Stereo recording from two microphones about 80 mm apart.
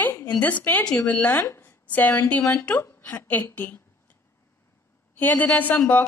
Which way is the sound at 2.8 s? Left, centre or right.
Left.